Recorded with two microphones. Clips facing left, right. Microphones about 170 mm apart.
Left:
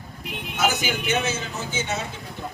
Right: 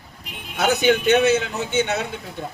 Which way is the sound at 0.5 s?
65° right (ahead or behind).